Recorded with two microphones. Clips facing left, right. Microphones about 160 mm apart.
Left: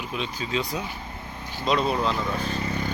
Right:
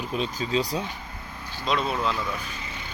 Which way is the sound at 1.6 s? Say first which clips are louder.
Left 3 dB; centre (ahead or behind).